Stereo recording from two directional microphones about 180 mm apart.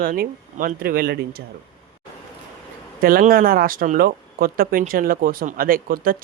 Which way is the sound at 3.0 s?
50° right (ahead or behind).